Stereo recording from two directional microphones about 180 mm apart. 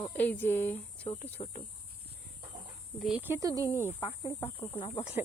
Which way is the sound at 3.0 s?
5° right (ahead or behind).